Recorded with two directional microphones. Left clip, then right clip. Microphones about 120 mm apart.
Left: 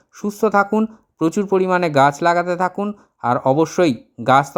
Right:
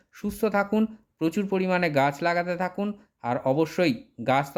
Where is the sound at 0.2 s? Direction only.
30° left (ahead or behind).